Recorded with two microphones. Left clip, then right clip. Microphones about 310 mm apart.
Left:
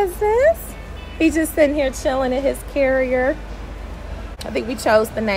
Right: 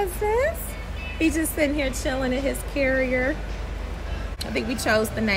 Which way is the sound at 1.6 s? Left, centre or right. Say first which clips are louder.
Left 7 dB; left.